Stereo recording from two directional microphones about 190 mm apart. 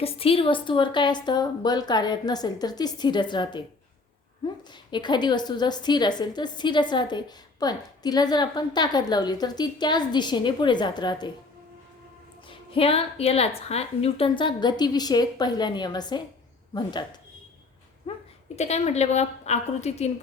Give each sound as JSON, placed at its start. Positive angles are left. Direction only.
{"t": 0.0, "sound": "a woman's voice", "side_deg": 30}
{"t": 4.7, "sound": "a woman's voice", "side_deg": 25}
{"t": 12.5, "sound": "a woman's voice", "side_deg": 30}
{"t": 18.0, "sound": "bleat", "side_deg": 30}
{"t": 18.5, "sound": "a woman's voice", "side_deg": 35}